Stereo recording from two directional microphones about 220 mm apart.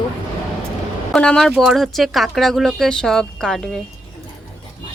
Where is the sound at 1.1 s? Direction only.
5° left (ahead or behind).